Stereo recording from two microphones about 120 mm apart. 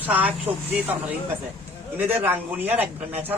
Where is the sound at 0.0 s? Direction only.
10° right (ahead or behind).